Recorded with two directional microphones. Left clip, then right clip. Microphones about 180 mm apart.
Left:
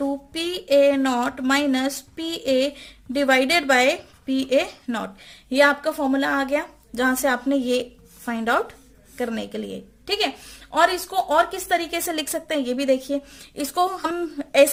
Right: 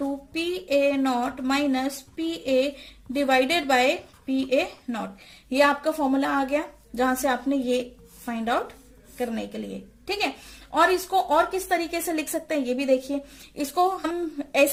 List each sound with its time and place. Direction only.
0.3 s a woman's voice: 45° left (ahead or behind)
10.7 s a woman's voice: 40° left (ahead or behind)